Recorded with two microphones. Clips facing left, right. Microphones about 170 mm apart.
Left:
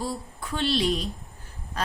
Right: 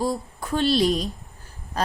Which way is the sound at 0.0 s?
45° right (ahead or behind).